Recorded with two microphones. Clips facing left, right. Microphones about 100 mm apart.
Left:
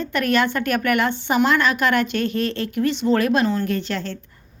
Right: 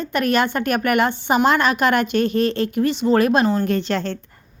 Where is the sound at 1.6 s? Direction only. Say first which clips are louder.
Right 2 dB; 20° right (ahead or behind).